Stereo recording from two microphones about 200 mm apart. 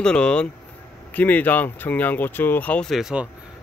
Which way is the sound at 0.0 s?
5° left (ahead or behind).